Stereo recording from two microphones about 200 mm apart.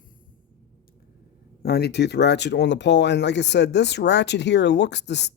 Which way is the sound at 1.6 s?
50° left (ahead or behind).